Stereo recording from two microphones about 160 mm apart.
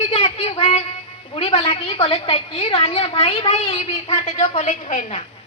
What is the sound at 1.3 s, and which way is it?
A woman's voice, 35° left (ahead or behind).